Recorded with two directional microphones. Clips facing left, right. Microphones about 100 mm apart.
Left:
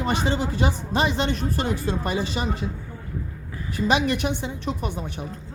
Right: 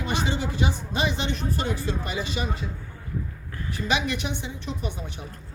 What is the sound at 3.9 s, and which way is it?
Speech, 50° left (ahead or behind).